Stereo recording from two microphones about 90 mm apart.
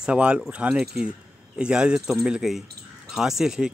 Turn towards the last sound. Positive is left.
turn(degrees=-5)  # may be behind; listen again after turning